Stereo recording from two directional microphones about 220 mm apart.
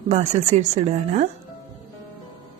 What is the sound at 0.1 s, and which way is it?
Speech, 30° right (ahead or behind).